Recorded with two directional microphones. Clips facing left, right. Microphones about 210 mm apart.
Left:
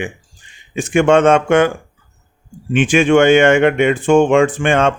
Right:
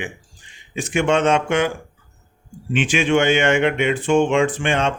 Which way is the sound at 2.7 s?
50° left (ahead or behind).